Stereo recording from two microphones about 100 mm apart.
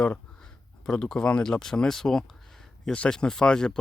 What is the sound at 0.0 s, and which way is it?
Speech, 10° left (ahead or behind).